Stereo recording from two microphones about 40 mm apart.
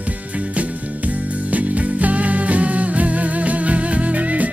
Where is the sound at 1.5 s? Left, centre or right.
Right.